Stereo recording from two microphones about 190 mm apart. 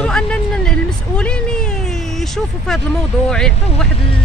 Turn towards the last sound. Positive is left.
turn(degrees=5)  # may be behind; listen again after turning